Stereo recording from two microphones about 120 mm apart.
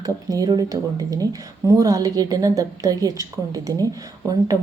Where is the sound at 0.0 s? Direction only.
30° right (ahead or behind).